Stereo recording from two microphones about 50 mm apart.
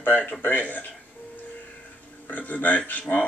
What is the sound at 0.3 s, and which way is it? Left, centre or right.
Speech, left.